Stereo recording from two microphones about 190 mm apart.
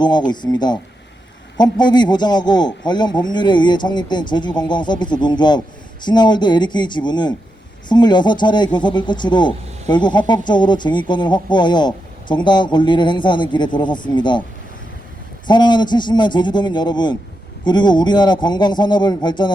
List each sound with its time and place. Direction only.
0.0 s speech: 20° left (ahead or behind)
15.4 s speech: 25° left (ahead or behind)